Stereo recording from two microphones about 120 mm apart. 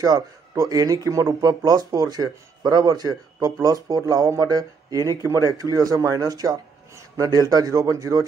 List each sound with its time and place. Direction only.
0.0 s speech: 30° right (ahead or behind)
5.2 s speech: 30° left (ahead or behind)
5.6 s speech: 30° right (ahead or behind)